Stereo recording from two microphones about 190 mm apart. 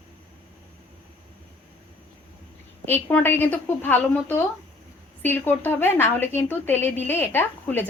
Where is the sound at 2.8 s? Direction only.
10° left (ahead or behind).